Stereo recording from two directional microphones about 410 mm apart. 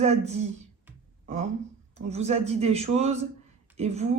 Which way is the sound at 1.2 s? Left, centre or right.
Centre.